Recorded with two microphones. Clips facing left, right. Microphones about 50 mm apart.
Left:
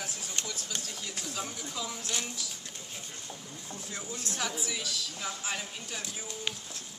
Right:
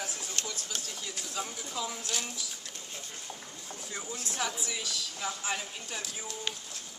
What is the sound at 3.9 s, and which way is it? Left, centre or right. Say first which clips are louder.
A woman's voice: even; centre.